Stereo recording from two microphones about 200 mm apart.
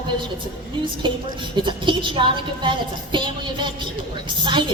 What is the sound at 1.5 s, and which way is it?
A woman's voice, 25° right (ahead or behind).